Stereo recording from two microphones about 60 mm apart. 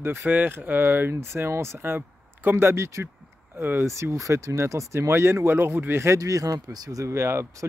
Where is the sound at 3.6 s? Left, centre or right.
Right.